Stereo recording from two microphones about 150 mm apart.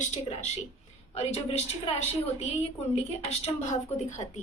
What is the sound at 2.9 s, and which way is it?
A woman's voice, 45° left (ahead or behind).